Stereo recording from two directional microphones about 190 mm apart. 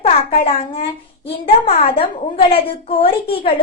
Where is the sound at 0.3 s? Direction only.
30° left (ahead or behind).